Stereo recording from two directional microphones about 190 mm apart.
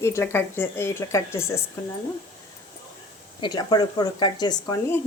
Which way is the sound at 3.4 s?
20° left (ahead or behind).